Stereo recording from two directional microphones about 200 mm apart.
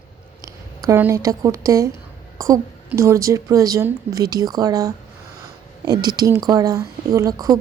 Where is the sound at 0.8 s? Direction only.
15° right (ahead or behind).